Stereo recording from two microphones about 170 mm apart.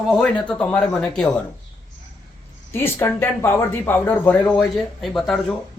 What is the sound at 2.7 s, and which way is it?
Speech, 15° left (ahead or behind).